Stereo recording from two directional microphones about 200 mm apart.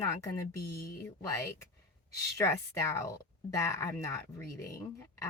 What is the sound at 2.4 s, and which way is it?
Speech, 15° left (ahead or behind).